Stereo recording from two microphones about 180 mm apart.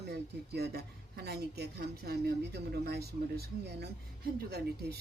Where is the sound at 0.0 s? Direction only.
65° right (ahead or behind).